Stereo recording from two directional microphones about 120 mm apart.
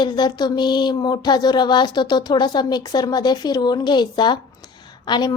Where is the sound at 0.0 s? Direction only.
35° left (ahead or behind).